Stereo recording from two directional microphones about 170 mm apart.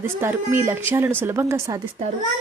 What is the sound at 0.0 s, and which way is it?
A woman's voice, 15° right (ahead or behind).